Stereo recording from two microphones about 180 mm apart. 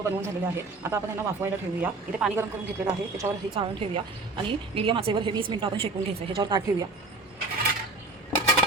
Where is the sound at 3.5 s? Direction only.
30° right (ahead or behind).